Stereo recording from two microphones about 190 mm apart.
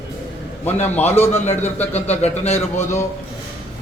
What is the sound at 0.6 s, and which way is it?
A man's voice, 10° left (ahead or behind).